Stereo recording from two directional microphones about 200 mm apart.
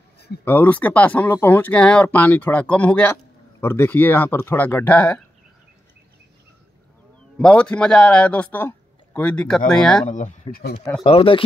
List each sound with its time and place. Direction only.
0.5 s speech: 10° left (ahead or behind)
7.3 s a man's voice: 5° left (ahead or behind)
10.0 s speech: 35° left (ahead or behind)
11.1 s speech: 25° left (ahead or behind)